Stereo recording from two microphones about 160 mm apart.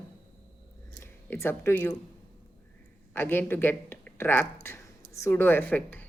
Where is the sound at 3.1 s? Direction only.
15° left (ahead or behind).